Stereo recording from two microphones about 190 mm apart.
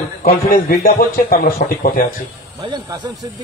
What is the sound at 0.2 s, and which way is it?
A man's voice, 45° left (ahead or behind).